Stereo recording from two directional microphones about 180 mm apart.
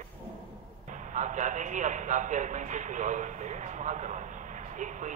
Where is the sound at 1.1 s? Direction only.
45° right (ahead or behind).